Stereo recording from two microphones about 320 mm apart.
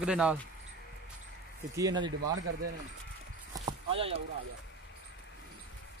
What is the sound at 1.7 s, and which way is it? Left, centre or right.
Speech, centre.